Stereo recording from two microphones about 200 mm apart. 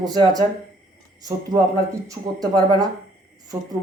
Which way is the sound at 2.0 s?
20° right (ahead or behind).